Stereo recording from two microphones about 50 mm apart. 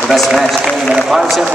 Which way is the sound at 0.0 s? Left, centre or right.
Centre.